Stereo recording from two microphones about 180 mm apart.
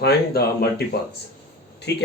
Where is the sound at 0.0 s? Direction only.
60° left (ahead or behind).